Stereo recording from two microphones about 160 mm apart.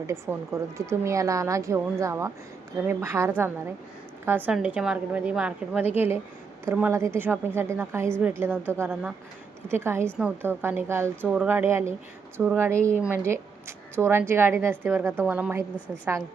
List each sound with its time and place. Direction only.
0.1 s a woman's voice: 15° right (ahead or behind)